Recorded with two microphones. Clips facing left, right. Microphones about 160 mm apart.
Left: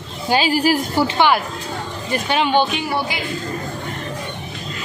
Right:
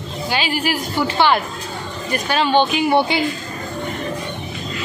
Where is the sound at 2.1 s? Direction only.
20° left (ahead or behind).